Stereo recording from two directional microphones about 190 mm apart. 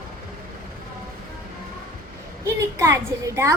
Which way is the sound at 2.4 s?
15° right (ahead or behind).